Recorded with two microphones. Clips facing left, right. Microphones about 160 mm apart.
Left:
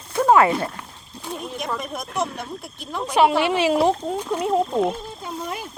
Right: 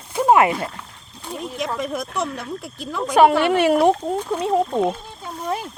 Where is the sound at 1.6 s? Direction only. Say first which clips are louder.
Right 7 dB; 90° right.